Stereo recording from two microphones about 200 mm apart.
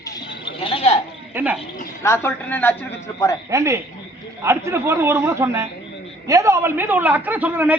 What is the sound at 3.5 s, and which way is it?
A man's voice, 15° right (ahead or behind).